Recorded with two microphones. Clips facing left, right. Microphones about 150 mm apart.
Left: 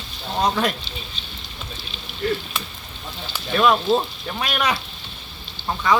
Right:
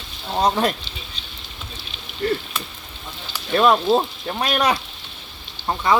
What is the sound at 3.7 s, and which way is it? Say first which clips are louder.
Stir: right 2 dB; 10° right (ahead or behind).